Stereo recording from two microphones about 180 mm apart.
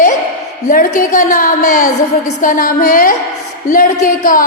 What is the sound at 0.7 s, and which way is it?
A woman's voice, 45° left (ahead or behind).